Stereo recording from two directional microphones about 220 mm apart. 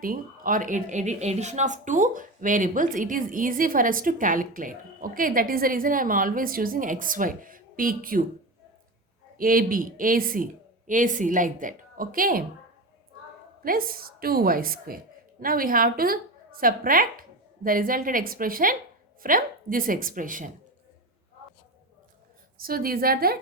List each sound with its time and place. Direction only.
0.0 s speech: 40° right (ahead or behind)
9.4 s speech: 40° right (ahead or behind)
13.6 s a woman's voice: 40° right (ahead or behind)
22.6 s a woman's voice: 40° right (ahead or behind)